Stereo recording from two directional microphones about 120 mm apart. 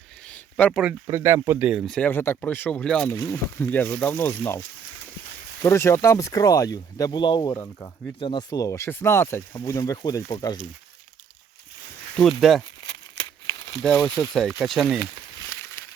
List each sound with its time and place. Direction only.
0.3 s a sound: 10° left (ahead or behind)
0.7 s speech: 5° right (ahead or behind)
1.2 s speech: 20° right (ahead or behind)
1.8 s speech: 5° left (ahead or behind)
2.0 s speech: 20° left (ahead or behind)
3.2 s speech: 15° left (ahead or behind)
5.6 s speech: 20° left (ahead or behind); by 8.4 s 40° left (ahead or behind)
8.4 s speech: 30° left (ahead or behind)
12.4 s speech: centre (ahead or behind)
12.8 s crumpling: 30° left (ahead or behind)
14.2 s speech: 5° left (ahead or behind)